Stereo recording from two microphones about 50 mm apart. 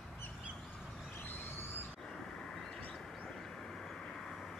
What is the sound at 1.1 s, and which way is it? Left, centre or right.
Vehicle, left.